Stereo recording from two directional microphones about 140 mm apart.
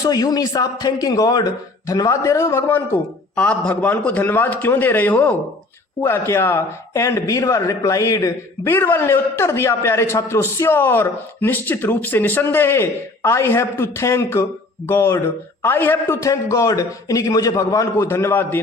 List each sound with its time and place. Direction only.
0.0 s a man's voice: 30° left (ahead or behind)